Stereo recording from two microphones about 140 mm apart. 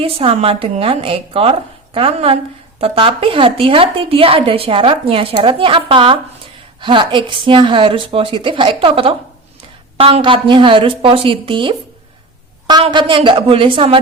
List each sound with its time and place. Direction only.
0.0 s a woman's voice: 40° right (ahead or behind)
12.8 s a woman's voice: 35° right (ahead or behind)